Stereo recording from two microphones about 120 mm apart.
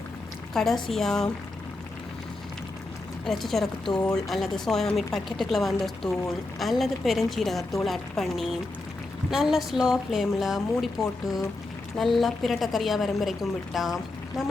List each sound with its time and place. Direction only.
0.5 s a woman's voice: centre (ahead or behind)
3.2 s a woman's voice: centre (ahead or behind)